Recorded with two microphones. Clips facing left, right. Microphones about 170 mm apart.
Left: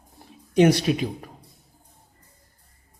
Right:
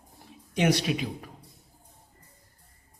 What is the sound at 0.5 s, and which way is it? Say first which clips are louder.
Speech: left 7 dB; 40° left (ahead or behind).